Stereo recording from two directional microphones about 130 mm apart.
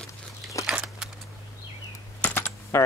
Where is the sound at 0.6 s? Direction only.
5° right (ahead or behind).